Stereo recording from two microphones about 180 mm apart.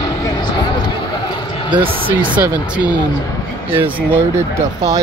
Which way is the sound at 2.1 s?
10° right (ahead or behind).